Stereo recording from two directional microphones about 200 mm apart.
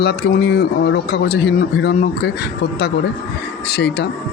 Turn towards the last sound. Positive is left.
turn(degrees=55)  # may be behind; listen again after turning